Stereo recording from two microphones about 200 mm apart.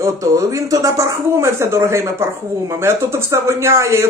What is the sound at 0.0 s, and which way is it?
Speech, 15° right (ahead or behind).